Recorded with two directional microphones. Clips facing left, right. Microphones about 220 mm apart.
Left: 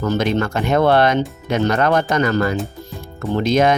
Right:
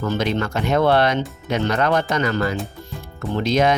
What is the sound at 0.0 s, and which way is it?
Speech, 45° left (ahead or behind).